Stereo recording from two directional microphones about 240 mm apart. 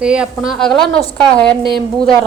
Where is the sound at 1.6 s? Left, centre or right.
Right.